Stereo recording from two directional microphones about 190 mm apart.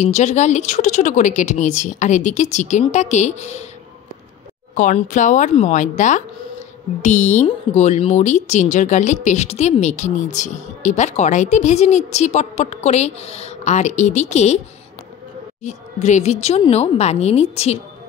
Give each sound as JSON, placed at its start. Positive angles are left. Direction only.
{"t": 0.0, "sound": "speech", "side_deg": 35}
{"t": 4.7, "sound": "speech", "side_deg": 45}
{"t": 15.6, "sound": "speech", "side_deg": 40}